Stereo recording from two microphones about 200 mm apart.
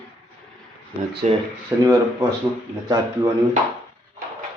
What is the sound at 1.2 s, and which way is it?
Speech, 35° right (ahead or behind).